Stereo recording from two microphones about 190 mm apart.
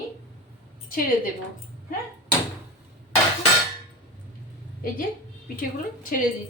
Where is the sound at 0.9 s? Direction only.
50° left (ahead or behind).